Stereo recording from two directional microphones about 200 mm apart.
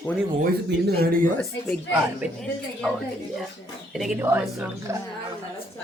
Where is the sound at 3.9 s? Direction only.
Centre (ahead or behind).